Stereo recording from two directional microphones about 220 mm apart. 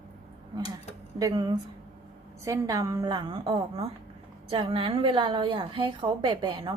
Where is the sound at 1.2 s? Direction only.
20° right (ahead or behind).